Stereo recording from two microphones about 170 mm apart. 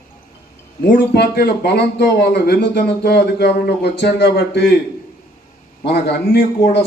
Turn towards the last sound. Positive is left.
turn(degrees=75)  # may be behind; listen again after turning